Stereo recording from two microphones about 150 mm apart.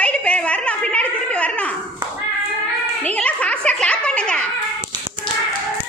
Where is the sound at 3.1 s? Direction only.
10° left (ahead or behind).